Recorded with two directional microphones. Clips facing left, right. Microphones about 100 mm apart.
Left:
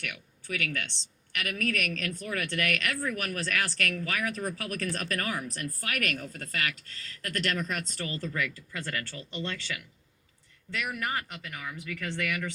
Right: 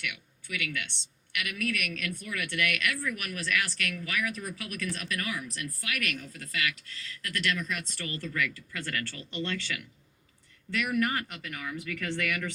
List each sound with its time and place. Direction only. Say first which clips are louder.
0.0 s a woman's voice: right 1 dB; 40° left (ahead or behind)